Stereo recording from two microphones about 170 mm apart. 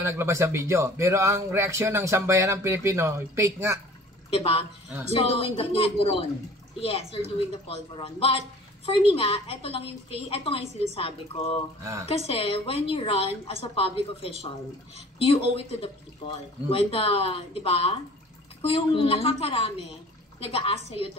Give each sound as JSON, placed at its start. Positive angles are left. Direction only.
{"t": 0.0, "sound": "speech", "side_deg": -15}
{"t": 4.3, "sound": "a woman's voice", "side_deg": 35}